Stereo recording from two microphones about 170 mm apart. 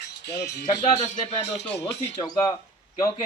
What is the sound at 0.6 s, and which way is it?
Speech, 40° left (ahead or behind).